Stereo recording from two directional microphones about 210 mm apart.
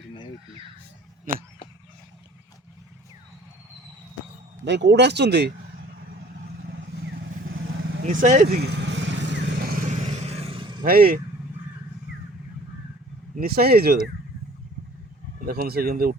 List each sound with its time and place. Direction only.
1.3 s speech: 40° right (ahead or behind)
4.6 s speech: 55° right (ahead or behind)
8.0 s speech: 40° right (ahead or behind)
8.7 s vehicle: 60° right (ahead or behind); by 10.8 s 25° right (ahead or behind)
10.8 s speech: 45° right (ahead or behind)
13.4 s speech: 45° right (ahead or behind)
15.4 s speech: 45° right (ahead or behind)